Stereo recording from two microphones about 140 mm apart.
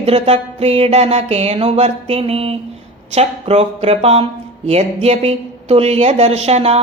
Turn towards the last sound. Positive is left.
turn(degrees=-50)  # may be behind; listen again after turning